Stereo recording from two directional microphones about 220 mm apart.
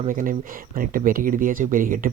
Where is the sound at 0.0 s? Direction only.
35° right (ahead or behind).